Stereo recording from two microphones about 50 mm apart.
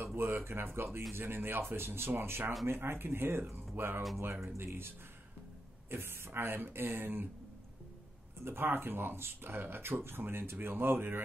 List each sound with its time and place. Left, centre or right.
0.0 s speech: right
8.5 s speech: right